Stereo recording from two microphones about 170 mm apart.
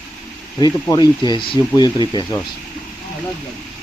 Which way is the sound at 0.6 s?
25° left (ahead or behind).